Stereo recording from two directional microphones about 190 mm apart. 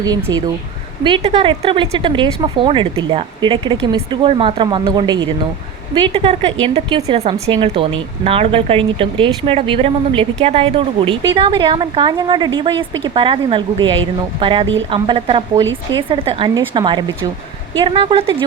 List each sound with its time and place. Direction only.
0.0 s speech: 20° right (ahead or behind)
15.6 s speech: 85° right
16.0 s speech: 30° right (ahead or behind)